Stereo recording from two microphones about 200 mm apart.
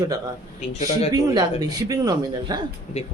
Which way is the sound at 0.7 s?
35° left (ahead or behind).